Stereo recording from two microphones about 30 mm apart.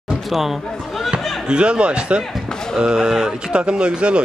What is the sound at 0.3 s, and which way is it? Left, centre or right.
Speech, centre.